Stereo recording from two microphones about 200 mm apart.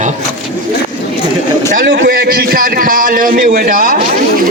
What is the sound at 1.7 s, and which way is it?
A man's voice, 45° right (ahead or behind).